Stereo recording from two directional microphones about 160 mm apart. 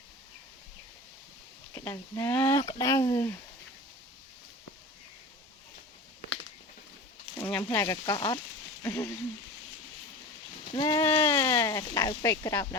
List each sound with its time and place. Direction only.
1.7 s speech: 20° left (ahead or behind)
7.3 s a sound: 10° left (ahead or behind)
7.8 s speech: 20° left (ahead or behind)
10.8 s speech: 25° left (ahead or behind)